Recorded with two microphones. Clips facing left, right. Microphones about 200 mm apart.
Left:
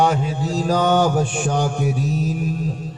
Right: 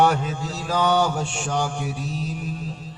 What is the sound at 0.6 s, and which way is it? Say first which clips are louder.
Mantra: left 3 dB; 40° left (ahead or behind).